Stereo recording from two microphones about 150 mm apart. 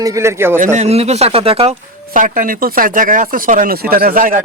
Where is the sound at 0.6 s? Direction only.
50° right (ahead or behind).